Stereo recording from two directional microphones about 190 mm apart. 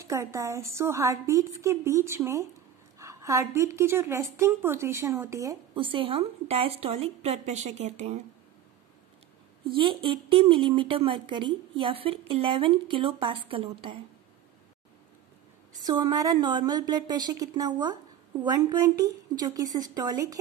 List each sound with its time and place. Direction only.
0.0 s a woman's voice: 15° right (ahead or behind); by 8.2 s 35° right (ahead or behind)
9.8 s a woman's voice: 25° right (ahead or behind)
15.8 s a woman's voice: 20° right (ahead or behind)